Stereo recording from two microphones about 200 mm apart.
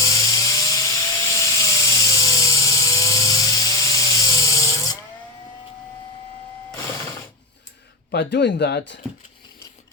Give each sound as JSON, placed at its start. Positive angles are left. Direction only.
{"t": 0.0, "sound": "wood", "side_deg": 15}
{"t": 8.1, "sound": "speech", "side_deg": 55}